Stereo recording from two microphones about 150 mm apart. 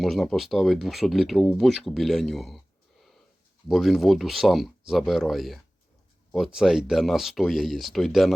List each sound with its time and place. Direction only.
0.0 s speech: centre (ahead or behind)
3.7 s speech: centre (ahead or behind)